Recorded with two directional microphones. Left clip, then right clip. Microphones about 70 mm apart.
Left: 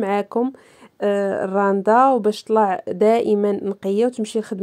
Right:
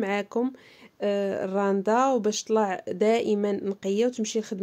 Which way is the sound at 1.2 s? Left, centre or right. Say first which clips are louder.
Left 7 dB; left.